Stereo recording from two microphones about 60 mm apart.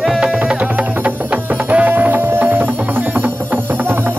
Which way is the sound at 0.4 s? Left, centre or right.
Right.